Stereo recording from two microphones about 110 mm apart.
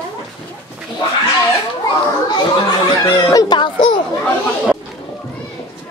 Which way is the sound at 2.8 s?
35° left (ahead or behind).